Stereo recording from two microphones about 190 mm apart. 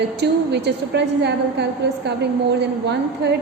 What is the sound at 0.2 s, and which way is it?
A woman's voice, 60° right (ahead or behind).